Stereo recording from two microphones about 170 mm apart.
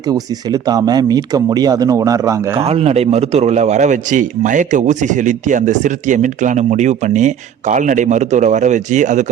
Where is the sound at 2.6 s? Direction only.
35° right (ahead or behind).